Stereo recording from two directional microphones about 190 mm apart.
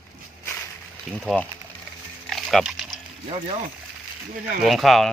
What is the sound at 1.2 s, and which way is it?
Speech, 10° left (ahead or behind).